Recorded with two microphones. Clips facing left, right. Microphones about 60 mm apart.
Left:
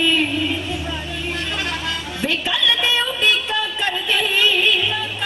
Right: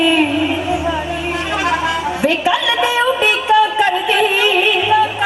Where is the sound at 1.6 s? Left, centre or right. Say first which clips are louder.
Right 9 dB; centre.